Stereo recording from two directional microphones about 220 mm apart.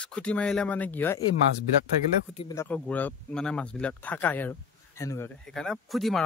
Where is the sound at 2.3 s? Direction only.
15° left (ahead or behind).